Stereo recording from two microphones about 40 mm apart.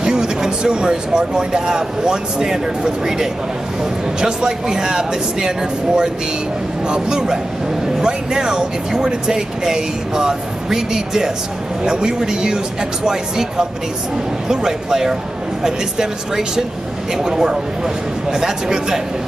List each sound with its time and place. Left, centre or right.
0.0 s a man's voice: centre